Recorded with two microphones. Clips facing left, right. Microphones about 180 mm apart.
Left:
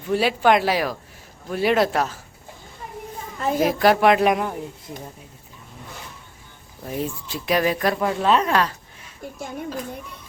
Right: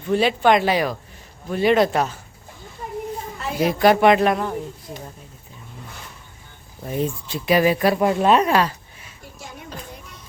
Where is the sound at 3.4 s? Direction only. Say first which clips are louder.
Left 5 dB; 45° left (ahead or behind).